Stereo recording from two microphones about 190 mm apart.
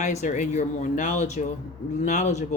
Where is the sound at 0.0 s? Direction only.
35° left (ahead or behind).